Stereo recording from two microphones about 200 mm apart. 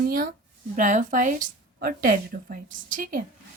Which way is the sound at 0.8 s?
40° right (ahead or behind).